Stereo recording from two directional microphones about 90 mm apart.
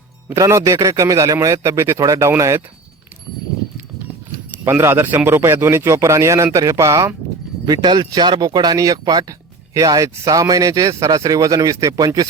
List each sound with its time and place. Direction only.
0.3 s a man's voice: 35° right (ahead or behind)
4.6 s a man's voice: 30° right (ahead or behind)
7.6 s a man's voice: 50° right (ahead or behind)